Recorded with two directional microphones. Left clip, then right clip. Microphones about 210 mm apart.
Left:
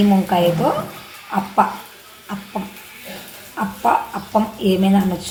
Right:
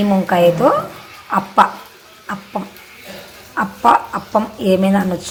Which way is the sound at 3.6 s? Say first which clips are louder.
Right 5 dB; 15° right (ahead or behind).